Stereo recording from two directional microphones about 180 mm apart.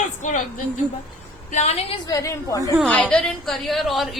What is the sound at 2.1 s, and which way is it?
Speech, 15° left (ahead or behind).